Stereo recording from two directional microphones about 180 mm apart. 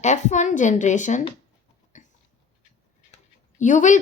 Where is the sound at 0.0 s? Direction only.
40° left (ahead or behind).